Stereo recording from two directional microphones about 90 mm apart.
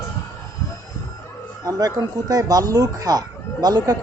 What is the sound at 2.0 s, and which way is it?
Speech, 45° right (ahead or behind).